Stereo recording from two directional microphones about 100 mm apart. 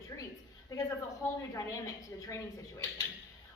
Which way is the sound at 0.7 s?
35° left (ahead or behind).